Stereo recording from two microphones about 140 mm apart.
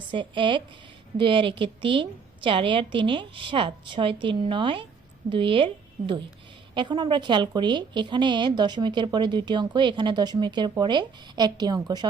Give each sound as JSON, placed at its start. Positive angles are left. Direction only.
{"t": 0.1, "sound": "a woman's voice", "side_deg": -35}